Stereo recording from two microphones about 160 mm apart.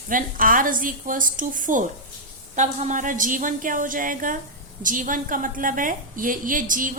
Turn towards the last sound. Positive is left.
turn(degrees=-55)  # may be behind; listen again after turning